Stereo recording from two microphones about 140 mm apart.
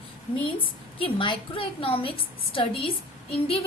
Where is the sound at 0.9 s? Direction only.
40° left (ahead or behind).